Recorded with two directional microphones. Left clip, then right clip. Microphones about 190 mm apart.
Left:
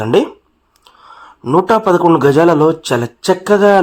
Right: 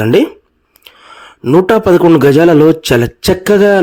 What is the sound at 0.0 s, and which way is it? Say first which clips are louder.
A man's voice: right 3 dB; 35° right (ahead or behind).